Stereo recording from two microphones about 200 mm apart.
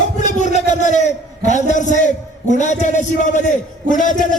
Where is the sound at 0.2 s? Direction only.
35° left (ahead or behind).